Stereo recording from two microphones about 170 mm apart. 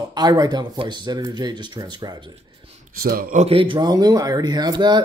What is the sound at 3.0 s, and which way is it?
Speech, 60° right (ahead or behind).